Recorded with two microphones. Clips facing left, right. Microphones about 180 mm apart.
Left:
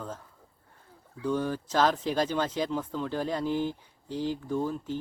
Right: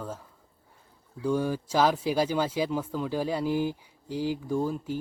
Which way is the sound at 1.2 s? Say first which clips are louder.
Right 2 dB; 10° right (ahead or behind).